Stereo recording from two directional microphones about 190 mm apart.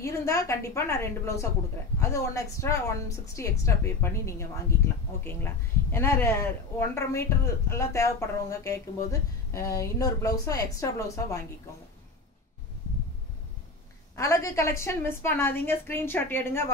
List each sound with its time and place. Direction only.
0.0 s a woman's voice: 15° left (ahead or behind)
14.1 s a woman's voice: 15° left (ahead or behind)